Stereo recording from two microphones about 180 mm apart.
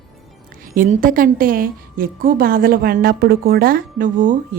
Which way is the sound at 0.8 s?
50° right (ahead or behind).